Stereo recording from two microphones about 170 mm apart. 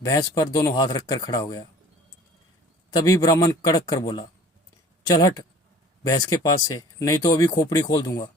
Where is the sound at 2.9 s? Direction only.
20° left (ahead or behind).